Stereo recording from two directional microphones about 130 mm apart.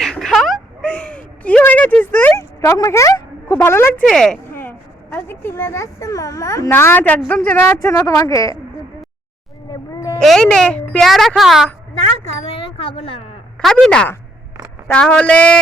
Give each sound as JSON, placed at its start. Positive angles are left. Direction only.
{"t": 0.0, "sound": "a sound", "side_deg": 5}
{"t": 4.0, "sound": "a woman's voice", "side_deg": 5}
{"t": 5.1, "sound": "a man's voice", "side_deg": 15}
{"t": 7.8, "sound": "speech", "side_deg": 25}
{"t": 9.9, "sound": "a sound", "side_deg": 25}
{"t": 10.2, "sound": "a woman's voice", "side_deg": 5}
{"t": 12.5, "sound": "speech", "side_deg": 45}
{"t": 13.6, "sound": "a woman's voice", "side_deg": 5}